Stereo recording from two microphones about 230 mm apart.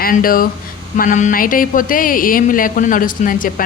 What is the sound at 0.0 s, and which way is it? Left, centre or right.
A woman's voice, left.